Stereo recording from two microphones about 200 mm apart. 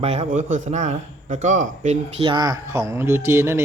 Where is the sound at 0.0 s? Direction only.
30° right (ahead or behind).